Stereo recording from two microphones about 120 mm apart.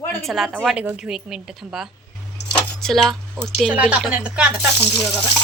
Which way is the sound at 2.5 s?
5° left (ahead or behind).